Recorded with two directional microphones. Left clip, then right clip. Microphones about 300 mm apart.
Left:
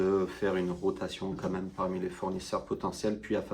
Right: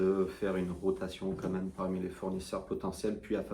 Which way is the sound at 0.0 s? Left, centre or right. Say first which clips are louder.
Left 2 dB; left.